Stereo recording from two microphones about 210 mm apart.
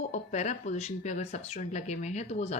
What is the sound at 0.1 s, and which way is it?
A woman's voice, 35° left (ahead or behind).